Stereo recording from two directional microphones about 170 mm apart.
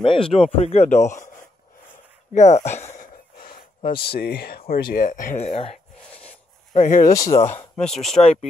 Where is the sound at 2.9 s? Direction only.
55° left (ahead or behind).